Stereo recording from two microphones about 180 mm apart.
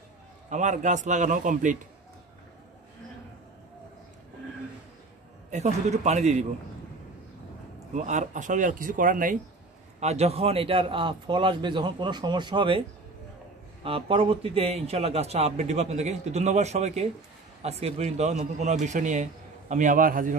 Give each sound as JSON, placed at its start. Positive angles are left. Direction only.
{"t": 0.5, "sound": "speech", "side_deg": -40}
{"t": 5.5, "sound": "a man's voice", "side_deg": -40}
{"t": 7.9, "sound": "speech", "side_deg": -40}
{"t": 9.9, "sound": "a man's voice", "side_deg": -35}
{"t": 13.8, "sound": "a man's voice", "side_deg": -30}